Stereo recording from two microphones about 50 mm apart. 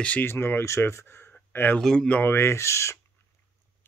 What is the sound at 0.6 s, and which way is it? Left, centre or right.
Speech, left.